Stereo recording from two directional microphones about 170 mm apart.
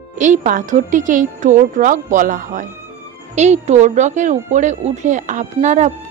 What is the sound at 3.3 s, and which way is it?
Speech, 40° right (ahead or behind).